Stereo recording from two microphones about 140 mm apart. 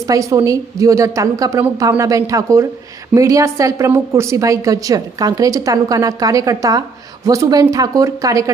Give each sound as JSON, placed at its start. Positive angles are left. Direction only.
{"t": 0.1, "sound": "a woman's voice", "side_deg": -20}